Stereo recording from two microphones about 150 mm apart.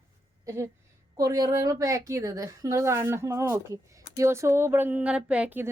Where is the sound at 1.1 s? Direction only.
25° right (ahead or behind).